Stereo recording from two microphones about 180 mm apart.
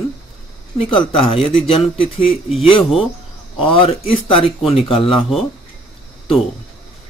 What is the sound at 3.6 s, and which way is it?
Speech, 30° left (ahead or behind).